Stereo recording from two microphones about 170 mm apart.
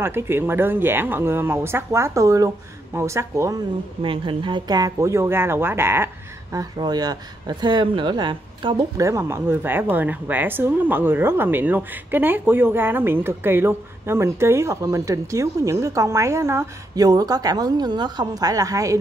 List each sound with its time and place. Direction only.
0.0 s speech: 15° right (ahead or behind)
4.0 s speech: 30° right (ahead or behind)